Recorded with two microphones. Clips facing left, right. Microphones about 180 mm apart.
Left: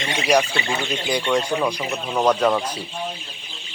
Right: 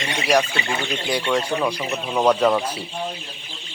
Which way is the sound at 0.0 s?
Centre (ahead or behind).